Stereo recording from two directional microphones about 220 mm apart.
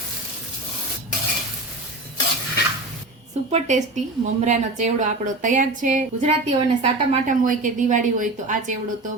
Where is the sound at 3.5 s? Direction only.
30° right (ahead or behind).